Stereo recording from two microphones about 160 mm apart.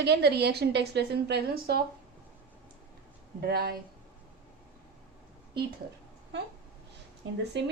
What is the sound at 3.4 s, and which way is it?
Speech, 70° right (ahead or behind).